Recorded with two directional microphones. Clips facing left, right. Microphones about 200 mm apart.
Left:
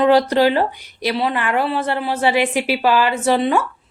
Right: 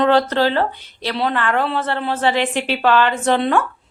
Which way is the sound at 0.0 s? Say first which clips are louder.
Left 2 dB; 10° left (ahead or behind).